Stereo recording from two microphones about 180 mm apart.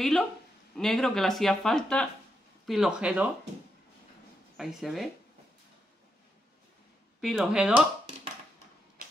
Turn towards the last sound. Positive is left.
turn(degrees=-5)  # may be behind; listen again after turning